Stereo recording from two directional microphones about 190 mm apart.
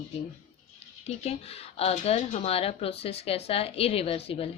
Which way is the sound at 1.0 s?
35° left (ahead or behind).